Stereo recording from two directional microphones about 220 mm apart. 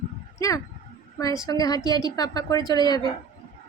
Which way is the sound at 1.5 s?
15° left (ahead or behind).